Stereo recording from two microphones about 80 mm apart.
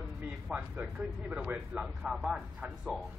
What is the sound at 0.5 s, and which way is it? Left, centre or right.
Speech, centre.